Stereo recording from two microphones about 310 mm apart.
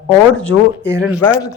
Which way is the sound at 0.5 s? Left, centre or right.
Left.